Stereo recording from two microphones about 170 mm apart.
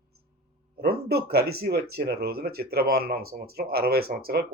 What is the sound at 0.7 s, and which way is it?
Speech, 65° right (ahead or behind).